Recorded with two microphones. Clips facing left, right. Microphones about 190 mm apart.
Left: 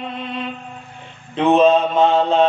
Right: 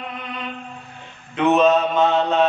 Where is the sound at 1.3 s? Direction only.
30° left (ahead or behind).